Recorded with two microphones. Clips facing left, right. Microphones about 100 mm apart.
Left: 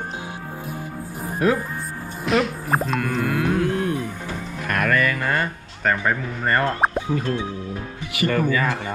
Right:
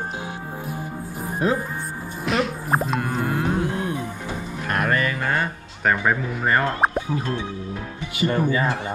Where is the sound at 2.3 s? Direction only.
Centre (ahead or behind).